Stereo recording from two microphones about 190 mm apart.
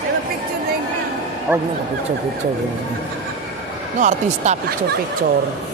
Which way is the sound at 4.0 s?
40° right (ahead or behind).